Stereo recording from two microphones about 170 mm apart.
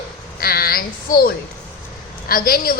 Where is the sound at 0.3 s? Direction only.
60° left (ahead or behind).